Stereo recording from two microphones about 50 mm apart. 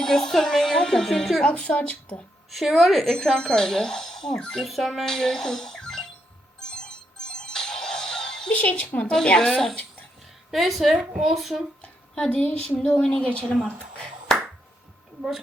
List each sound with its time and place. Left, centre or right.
0.0 s music: centre
1.5 s speech: left
2.5 s a woman's voice: centre
4.6 s speech: centre
6.6 s music: centre
8.6 s speech: left
9.2 s a woman's voice: centre
10.5 s a woman's voice: centre
12.1 s a woman's voice: centre
13.7 s a sound: left